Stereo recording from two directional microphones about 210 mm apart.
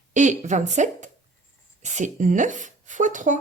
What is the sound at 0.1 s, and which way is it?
A woman's voice, 35° right (ahead or behind).